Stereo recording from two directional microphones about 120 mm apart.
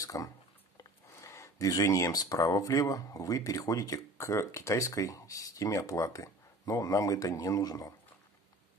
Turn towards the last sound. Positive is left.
turn(degrees=30)  # may be behind; listen again after turning